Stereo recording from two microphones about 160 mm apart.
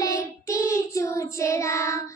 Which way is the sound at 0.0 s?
20° left (ahead or behind).